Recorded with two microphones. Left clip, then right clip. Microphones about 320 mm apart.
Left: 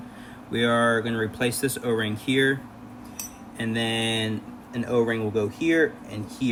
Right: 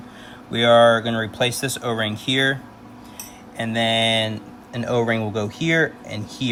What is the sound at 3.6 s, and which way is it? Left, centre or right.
Speech, right.